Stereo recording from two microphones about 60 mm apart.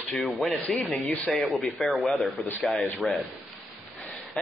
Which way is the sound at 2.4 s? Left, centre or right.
Left.